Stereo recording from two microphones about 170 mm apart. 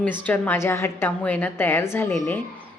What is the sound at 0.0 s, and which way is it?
A woman's voice, 10° left (ahead or behind).